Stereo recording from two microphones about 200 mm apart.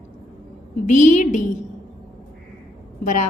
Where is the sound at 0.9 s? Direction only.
40° left (ahead or behind).